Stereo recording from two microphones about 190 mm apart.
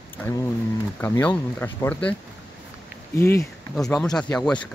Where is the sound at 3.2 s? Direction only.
10° left (ahead or behind).